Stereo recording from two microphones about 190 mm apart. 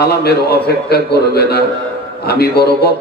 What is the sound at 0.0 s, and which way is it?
A man's voice, 55° left (ahead or behind).